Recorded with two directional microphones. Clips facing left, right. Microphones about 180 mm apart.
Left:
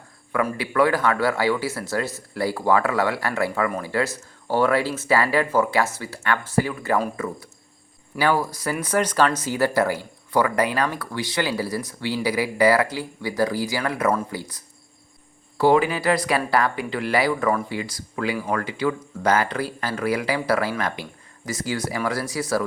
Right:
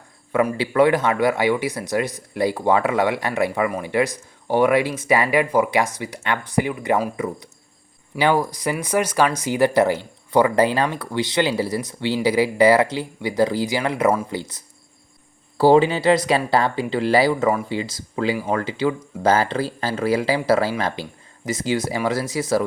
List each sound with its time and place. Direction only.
0.3 s speech: 25° right (ahead or behind)